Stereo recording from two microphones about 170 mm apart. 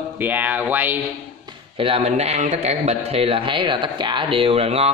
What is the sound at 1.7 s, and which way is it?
A man's voice, 35° right (ahead or behind).